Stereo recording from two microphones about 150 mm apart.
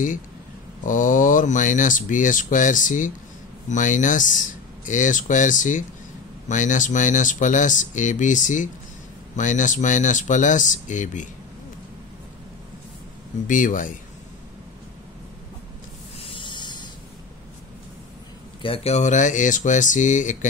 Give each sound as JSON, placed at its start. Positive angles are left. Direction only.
{"t": 0.8, "sound": "speech", "side_deg": 60}
{"t": 13.5, "sound": "speech", "side_deg": 60}
{"t": 16.2, "sound": "snake", "side_deg": 30}
{"t": 18.6, "sound": "speech", "side_deg": 40}